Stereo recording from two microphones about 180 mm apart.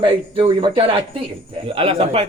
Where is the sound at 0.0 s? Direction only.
30° right (ahead or behind).